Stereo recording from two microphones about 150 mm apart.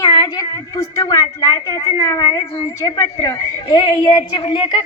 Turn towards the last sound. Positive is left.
turn(degrees=35)  # may be behind; listen again after turning